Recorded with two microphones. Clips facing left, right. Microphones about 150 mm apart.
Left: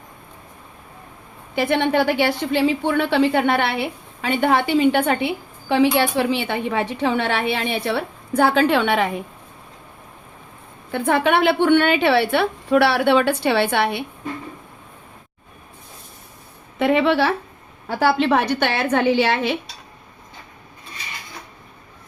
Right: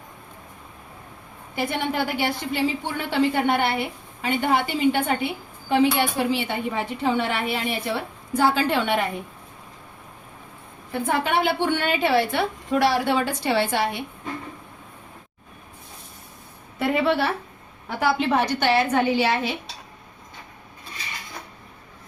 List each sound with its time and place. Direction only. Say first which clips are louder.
1.5 s a woman's voice: left 7 dB; 70° left (ahead or behind)
10.9 s a woman's voice: left 5 dB; 75° left (ahead or behind)
16.7 s a woman's voice: left 4 dB; 90° left; by 19.5 s 70° left (ahead or behind)